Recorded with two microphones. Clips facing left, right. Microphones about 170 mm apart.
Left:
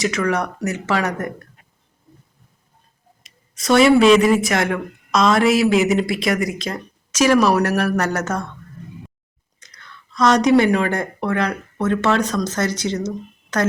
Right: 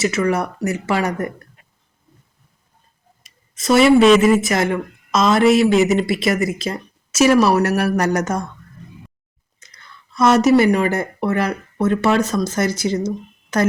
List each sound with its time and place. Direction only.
0.0 s speech: 5° right (ahead or behind)
3.5 s a woman's voice: centre (ahead or behind)
9.6 s speech: 10° right (ahead or behind)